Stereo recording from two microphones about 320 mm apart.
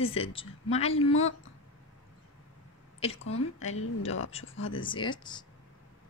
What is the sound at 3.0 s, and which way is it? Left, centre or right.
A woman's voice, centre.